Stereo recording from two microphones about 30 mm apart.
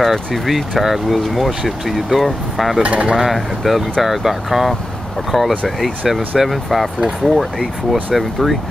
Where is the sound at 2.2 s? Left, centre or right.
Centre.